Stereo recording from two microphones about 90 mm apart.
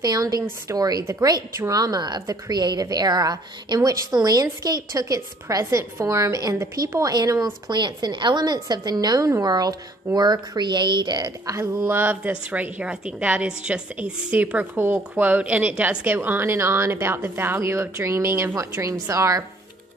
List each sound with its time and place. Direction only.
0.0 s a woman's voice: 45° right (ahead or behind)
11.5 s a woman's voice: 35° right (ahead or behind)
12.0 s a woman's voice: 15° right (ahead or behind); by 19.4 s 40° right (ahead or behind)